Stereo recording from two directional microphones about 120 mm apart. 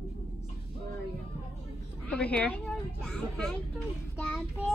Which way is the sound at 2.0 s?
10° left (ahead or behind).